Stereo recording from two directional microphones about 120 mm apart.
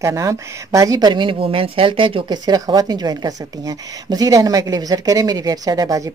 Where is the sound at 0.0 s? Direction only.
25° right (ahead or behind).